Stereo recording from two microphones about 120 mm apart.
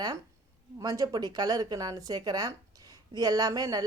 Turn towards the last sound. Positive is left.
turn(degrees=-30)  # may be behind; listen again after turning